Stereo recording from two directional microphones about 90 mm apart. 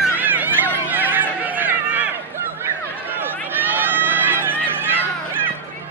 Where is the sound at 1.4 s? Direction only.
20° right (ahead or behind).